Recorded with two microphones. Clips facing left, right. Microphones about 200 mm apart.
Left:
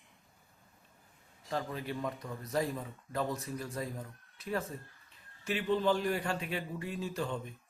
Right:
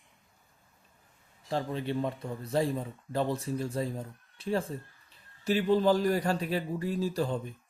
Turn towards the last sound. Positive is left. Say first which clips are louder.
# right 6 dB
turn(degrees=-35)  # may be behind; listen again after turning